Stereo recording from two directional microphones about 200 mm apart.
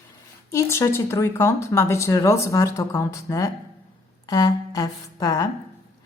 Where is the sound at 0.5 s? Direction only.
15° left (ahead or behind).